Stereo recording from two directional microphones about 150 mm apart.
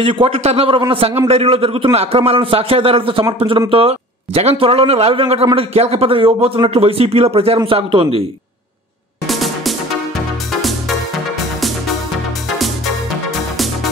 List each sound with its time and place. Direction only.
0.0 s a man's voice: 40° right (ahead or behind)
9.3 s music: centre (ahead or behind)
12.5 s music: centre (ahead or behind)